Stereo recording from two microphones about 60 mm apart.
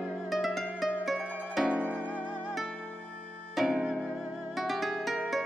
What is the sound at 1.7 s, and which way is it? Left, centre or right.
Music, right.